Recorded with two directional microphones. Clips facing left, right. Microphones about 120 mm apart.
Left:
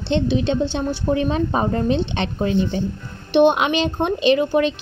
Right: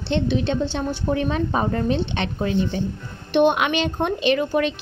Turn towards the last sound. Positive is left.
turn(degrees=25)  # may be behind; listen again after turning